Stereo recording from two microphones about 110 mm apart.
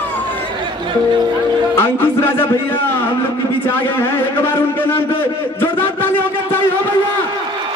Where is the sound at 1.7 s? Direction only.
20° left (ahead or behind).